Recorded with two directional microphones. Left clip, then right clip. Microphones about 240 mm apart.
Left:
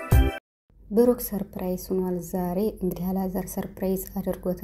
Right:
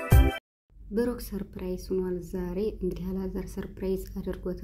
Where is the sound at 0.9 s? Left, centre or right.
Centre.